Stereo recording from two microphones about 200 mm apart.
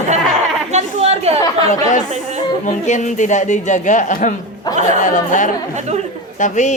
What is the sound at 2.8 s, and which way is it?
A man's voice, 35° left (ahead or behind).